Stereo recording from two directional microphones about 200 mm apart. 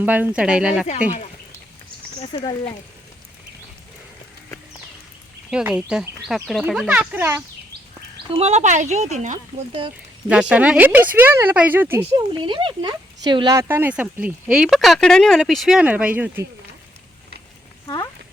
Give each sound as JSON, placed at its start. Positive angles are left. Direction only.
{"t": 0.0, "sound": "speech", "side_deg": -10}
{"t": 2.3, "sound": "speech", "side_deg": 25}
{"t": 5.5, "sound": "speech", "side_deg": -5}
{"t": 8.3, "sound": "speech", "side_deg": -30}
{"t": 10.2, "sound": "speech", "side_deg": -5}
{"t": 12.1, "sound": "speech", "side_deg": -25}
{"t": 17.8, "sound": "speech", "side_deg": 20}